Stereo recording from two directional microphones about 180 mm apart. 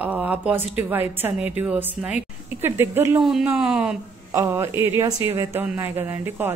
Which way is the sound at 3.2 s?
Centre (ahead or behind).